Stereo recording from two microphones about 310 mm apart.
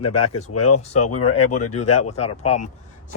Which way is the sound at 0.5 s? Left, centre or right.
Left.